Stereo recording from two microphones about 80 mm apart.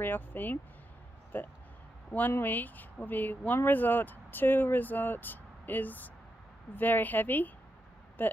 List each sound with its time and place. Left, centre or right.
0.0 s speech: left